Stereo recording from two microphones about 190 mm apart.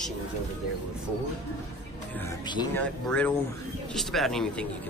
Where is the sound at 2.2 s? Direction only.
20° left (ahead or behind).